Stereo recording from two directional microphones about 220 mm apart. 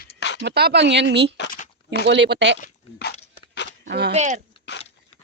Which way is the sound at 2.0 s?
50° right (ahead or behind).